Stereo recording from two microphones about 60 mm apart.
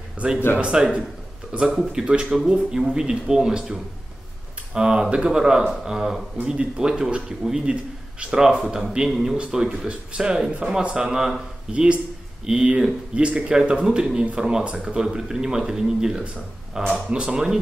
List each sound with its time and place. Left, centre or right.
0.2 s speech: right
4.7 s speech: centre
11.7 s speech: centre